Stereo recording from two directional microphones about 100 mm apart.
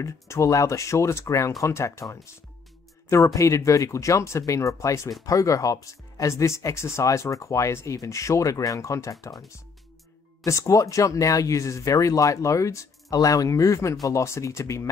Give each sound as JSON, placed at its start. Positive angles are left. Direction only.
{"t": 0.0, "sound": "speech", "side_deg": 30}
{"t": 3.3, "sound": "speech", "side_deg": 30}
{"t": 10.4, "sound": "speech", "side_deg": 30}